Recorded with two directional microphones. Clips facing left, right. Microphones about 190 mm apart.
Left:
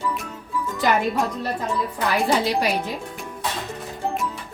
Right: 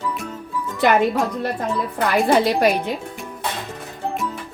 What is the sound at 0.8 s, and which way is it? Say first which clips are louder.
Speech: right 4 dB; 65° right (ahead or behind).